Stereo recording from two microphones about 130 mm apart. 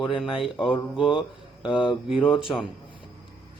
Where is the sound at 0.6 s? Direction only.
40° left (ahead or behind).